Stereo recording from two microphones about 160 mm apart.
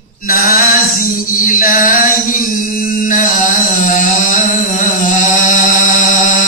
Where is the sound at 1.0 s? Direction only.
60° left (ahead or behind).